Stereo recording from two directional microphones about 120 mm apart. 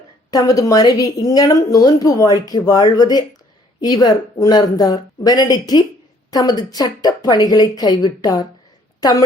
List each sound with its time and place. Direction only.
0.3 s a woman's voice: 30° left (ahead or behind)